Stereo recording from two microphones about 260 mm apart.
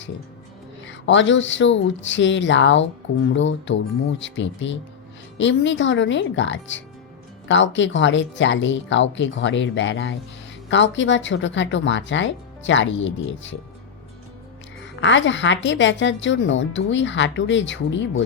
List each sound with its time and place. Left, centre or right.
0.9 s a woman's voice: left
15.0 s a woman's voice: left